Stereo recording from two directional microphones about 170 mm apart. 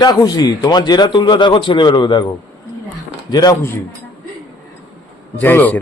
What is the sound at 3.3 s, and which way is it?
Speech, 20° left (ahead or behind).